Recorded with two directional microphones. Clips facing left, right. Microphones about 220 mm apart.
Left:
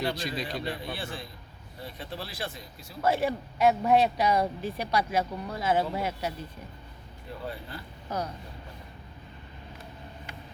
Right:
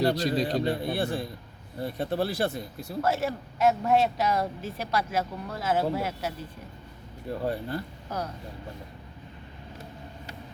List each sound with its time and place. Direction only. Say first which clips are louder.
0.0 s speech: right 7 dB; 40° right (ahead or behind)
1.8 s speech: right 11 dB; 55° right (ahead or behind)
3.0 s speech: left 1 dB; centre (ahead or behind)
7.4 s speech: right 8 dB; 45° right (ahead or behind)